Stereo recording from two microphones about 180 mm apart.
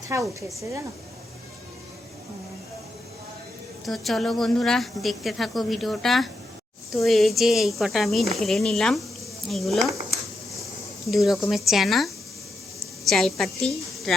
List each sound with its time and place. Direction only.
0.1 s speech: 15° right (ahead or behind)
3.8 s speech: centre (ahead or behind)
11.1 s speech: centre (ahead or behind)